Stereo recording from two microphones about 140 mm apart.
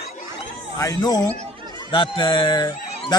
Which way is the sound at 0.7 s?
25° left (ahead or behind).